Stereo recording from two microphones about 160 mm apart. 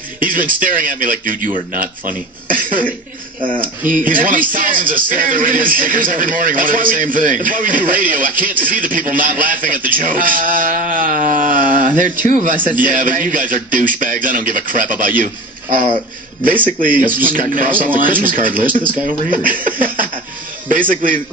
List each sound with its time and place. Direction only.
0.2 s speech: 60° right (ahead or behind)
16.8 s speech: 55° right (ahead or behind)
19.6 s a sound: 60° right (ahead or behind)
20.6 s speech: 55° right (ahead or behind)